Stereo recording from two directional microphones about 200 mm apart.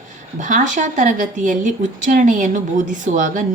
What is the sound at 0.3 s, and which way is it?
A woman's voice, 40° right (ahead or behind).